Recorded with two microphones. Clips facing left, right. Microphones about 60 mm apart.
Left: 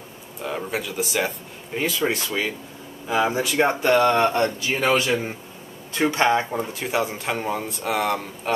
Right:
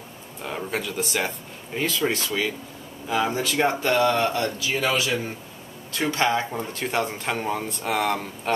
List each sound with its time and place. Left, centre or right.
0.4 s speech: centre
3.6 s speech: left
5.9 s speech: left
6.5 s speech: centre